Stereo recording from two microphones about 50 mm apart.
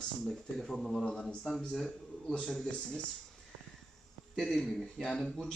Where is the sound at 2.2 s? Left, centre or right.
Left.